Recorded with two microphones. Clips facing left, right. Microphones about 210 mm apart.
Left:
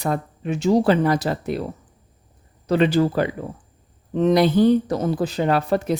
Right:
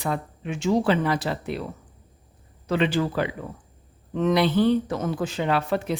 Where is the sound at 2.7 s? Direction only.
40° left (ahead or behind).